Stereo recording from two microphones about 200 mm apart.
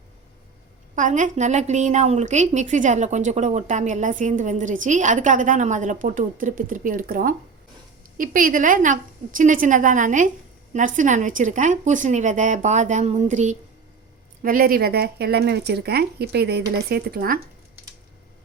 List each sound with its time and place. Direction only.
0.9 s a woman's voice: 40° right (ahead or behind)